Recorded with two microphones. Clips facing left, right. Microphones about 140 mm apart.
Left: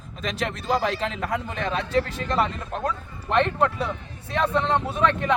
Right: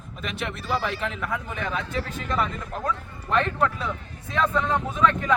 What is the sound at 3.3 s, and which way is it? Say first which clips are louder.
A man's voice: left 2 dB; 25° left (ahead or behind).